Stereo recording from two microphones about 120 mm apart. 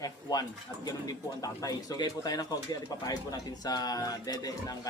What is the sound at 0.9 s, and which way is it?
Speech, 30° left (ahead or behind).